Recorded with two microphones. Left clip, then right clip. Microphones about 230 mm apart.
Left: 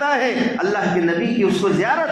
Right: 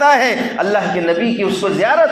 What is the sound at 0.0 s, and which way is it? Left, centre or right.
A man's voice, right.